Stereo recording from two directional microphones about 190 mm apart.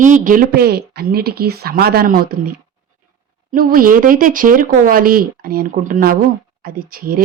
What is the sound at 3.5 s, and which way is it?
Speech, 50° right (ahead or behind).